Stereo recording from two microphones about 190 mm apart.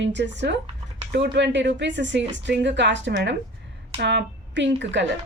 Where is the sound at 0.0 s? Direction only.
70° right (ahead or behind).